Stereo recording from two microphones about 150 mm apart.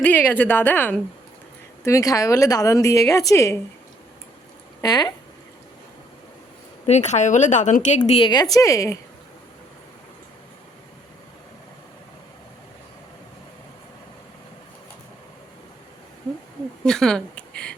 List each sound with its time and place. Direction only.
0.0 s a woman's voice: 10° left (ahead or behind)
4.8 s a woman's voice: 25° left (ahead or behind)
6.8 s a woman's voice: 50° left (ahead or behind)
8.2 s a woman's voice: 30° left (ahead or behind)
16.8 s a sound: 5° left (ahead or behind)